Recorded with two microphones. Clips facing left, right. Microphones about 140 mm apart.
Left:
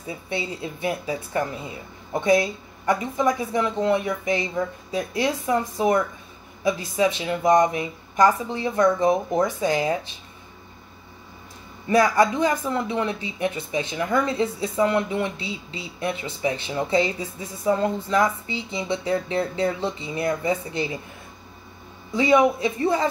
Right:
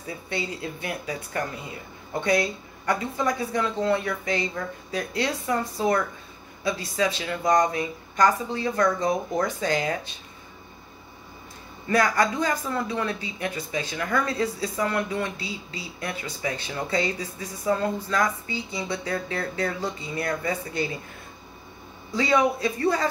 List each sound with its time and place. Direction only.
0.0 s speech: 25° left (ahead or behind)
11.9 s speech: 25° left (ahead or behind)
22.1 s speech: 20° left (ahead or behind)